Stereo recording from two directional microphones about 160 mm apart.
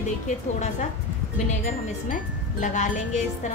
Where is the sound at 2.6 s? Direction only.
50° left (ahead or behind).